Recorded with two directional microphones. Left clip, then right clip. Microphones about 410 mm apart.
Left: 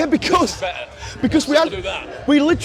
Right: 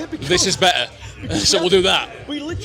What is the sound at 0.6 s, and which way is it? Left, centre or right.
Speech, right.